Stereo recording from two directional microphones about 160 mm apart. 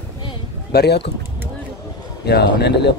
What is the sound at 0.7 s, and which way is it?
Speech, 90° left.